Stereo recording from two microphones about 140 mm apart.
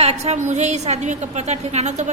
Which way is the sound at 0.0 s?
50° right (ahead or behind).